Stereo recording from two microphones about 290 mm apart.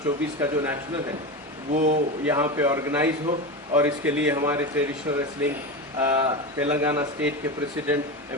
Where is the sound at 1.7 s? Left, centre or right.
Right.